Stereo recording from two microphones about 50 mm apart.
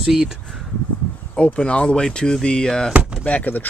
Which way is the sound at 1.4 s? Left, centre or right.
Left.